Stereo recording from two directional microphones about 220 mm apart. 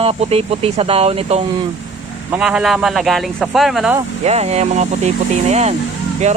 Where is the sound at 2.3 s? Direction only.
5° right (ahead or behind).